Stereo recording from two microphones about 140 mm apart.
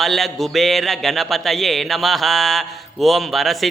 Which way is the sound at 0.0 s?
Centre (ahead or behind).